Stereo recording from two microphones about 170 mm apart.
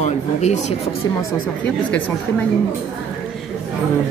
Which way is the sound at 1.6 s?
10° left (ahead or behind).